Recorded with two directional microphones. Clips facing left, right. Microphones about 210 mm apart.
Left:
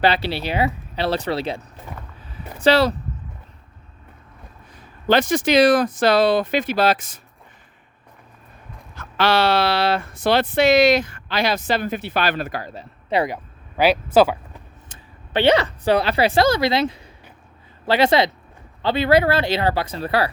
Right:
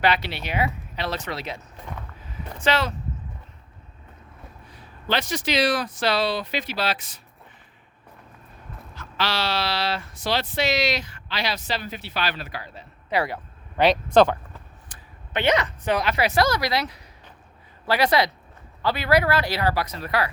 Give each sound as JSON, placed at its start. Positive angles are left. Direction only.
{"t": 0.0, "sound": "speech", "side_deg": 30}
{"t": 4.7, "sound": "speech", "side_deg": 45}
{"t": 9.0, "sound": "speech", "side_deg": 55}
{"t": 13.1, "sound": "speech", "side_deg": 20}
{"t": 13.7, "sound": "speech", "side_deg": 5}
{"t": 14.8, "sound": "a woman's voice", "side_deg": 25}